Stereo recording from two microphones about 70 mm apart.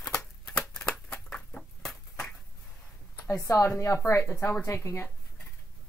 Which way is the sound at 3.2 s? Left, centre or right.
Left.